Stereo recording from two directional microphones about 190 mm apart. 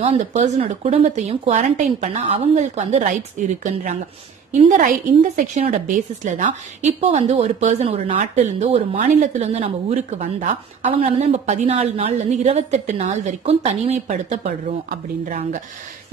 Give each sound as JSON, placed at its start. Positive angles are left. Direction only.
{"t": 0.0, "sound": "a woman's voice", "side_deg": -35}